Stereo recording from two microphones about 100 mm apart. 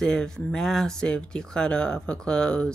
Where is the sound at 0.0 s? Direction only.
5° left (ahead or behind).